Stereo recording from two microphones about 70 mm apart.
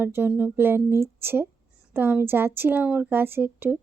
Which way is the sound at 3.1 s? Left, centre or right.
Right.